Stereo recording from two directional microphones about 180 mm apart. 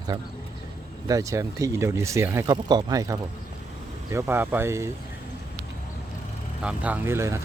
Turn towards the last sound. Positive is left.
turn(degrees=-15)  # may be behind; listen again after turning